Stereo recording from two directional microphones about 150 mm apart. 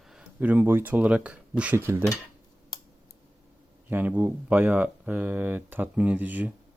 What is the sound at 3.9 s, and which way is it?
Speech, 10° right (ahead or behind).